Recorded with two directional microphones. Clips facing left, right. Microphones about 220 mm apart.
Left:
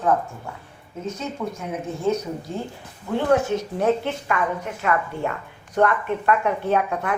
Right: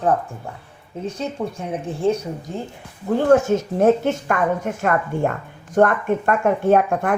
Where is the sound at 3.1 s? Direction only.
45° right (ahead or behind).